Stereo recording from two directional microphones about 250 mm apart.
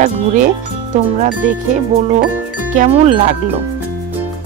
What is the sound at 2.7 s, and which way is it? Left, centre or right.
Speech, right.